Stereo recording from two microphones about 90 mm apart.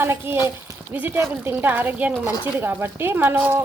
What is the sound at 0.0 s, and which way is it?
A woman's voice, 25° right (ahead or behind).